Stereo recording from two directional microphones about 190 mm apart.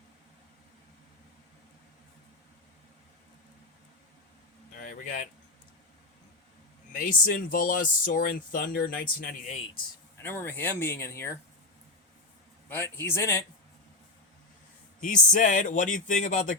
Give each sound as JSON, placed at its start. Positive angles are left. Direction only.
{"t": 4.7, "sound": "a sound", "side_deg": 45}
{"t": 6.9, "sound": "speech", "side_deg": 45}
{"t": 10.2, "sound": "speech", "side_deg": 10}
{"t": 12.6, "sound": "speech", "side_deg": 10}
{"t": 15.0, "sound": "speech", "side_deg": 40}